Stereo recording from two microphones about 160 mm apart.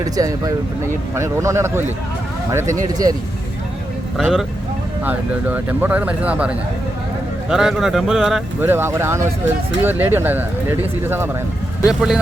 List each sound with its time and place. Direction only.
0.0 s speech: 20° right (ahead or behind)
4.2 s speech: centre (ahead or behind)
7.5 s speech: centre (ahead or behind)
8.6 s speech: 15° right (ahead or behind)